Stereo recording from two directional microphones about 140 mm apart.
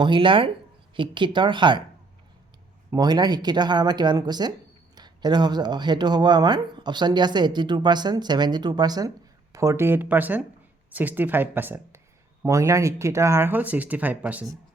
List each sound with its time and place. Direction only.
0.0 s speech: 35° right (ahead or behind)
2.9 s speech: 30° right (ahead or behind); by 14.4 s 10° right (ahead or behind)